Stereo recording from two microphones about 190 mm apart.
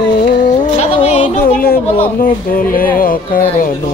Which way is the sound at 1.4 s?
50° left (ahead or behind).